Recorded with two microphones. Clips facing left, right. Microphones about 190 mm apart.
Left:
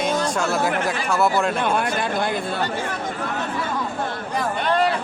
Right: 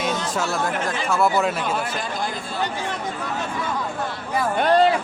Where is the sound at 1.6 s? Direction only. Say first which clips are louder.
Left 4 dB; 70° left (ahead or behind).